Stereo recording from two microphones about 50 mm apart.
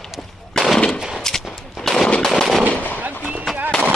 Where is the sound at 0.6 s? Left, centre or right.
Centre.